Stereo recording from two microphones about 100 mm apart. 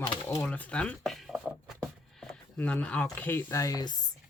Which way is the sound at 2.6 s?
15° left (ahead or behind).